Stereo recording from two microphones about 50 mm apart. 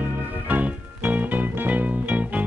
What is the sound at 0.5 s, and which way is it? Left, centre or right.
Music, right.